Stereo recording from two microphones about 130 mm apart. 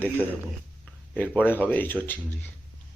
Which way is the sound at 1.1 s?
10° left (ahead or behind).